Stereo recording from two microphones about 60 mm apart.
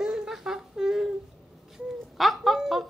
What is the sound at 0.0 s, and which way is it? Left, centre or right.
Humming, centre.